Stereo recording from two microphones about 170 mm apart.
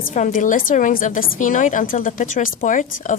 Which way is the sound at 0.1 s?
50° left (ahead or behind).